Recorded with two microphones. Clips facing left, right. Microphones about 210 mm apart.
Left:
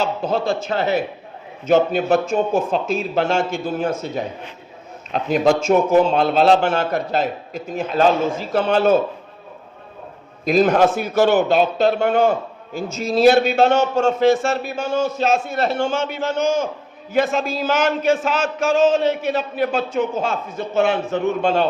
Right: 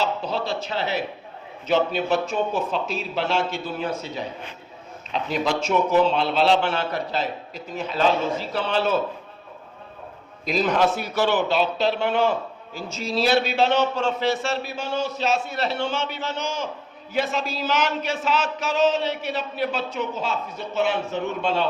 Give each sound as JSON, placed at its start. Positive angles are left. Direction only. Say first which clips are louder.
{"t": 0.0, "sound": "a man's voice", "louder": "left 5 dB", "side_deg": 50}
{"t": 10.4, "sound": "a man's voice", "louder": "left 6 dB", "side_deg": 50}